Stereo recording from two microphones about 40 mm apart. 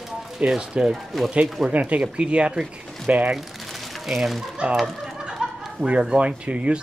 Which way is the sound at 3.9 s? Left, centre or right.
Centre.